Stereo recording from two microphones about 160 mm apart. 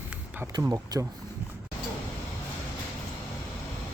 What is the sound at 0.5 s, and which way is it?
Speech, 25° right (ahead or behind).